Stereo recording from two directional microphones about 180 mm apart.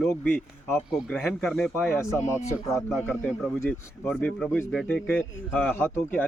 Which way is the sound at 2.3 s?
15° left (ahead or behind).